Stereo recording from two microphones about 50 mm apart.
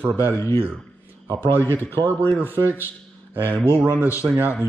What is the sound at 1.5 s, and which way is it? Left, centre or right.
Speech, left.